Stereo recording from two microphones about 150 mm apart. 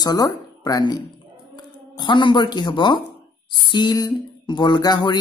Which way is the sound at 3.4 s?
30° left (ahead or behind).